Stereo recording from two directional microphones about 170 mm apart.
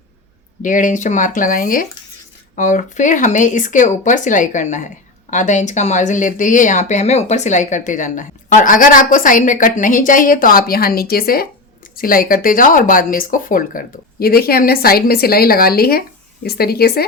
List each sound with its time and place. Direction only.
0.6 s speech: 50° left (ahead or behind); by 17.1 s 65° left (ahead or behind)